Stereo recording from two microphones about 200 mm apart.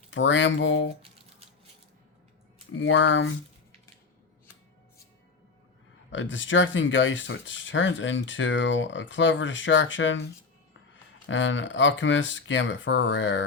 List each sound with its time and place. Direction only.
0.1 s speech: 70° left (ahead or behind)
2.7 s speech: 70° left (ahead or behind)
6.1 s speech: 70° left (ahead or behind)